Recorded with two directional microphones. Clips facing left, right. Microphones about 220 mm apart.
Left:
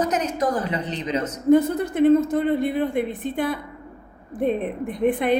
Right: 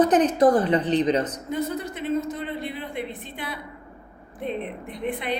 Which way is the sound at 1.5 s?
50° left (ahead or behind).